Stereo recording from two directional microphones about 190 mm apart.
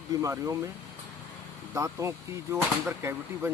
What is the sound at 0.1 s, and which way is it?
Speech, 15° right (ahead or behind).